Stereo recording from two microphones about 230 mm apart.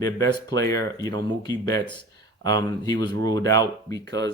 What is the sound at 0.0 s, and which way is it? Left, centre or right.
Speech, centre.